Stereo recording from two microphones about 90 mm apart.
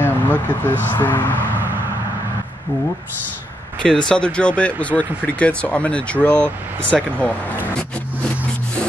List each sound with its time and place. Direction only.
0.0 s speech: 20° left (ahead or behind)
4.1 s speech: 10° left (ahead or behind)